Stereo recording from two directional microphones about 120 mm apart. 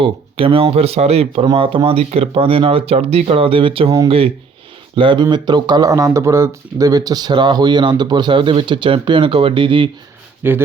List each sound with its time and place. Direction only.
0.0 s speech: 50° right (ahead or behind)
4.9 s speech: 40° right (ahead or behind)
10.4 s speech: 20° right (ahead or behind)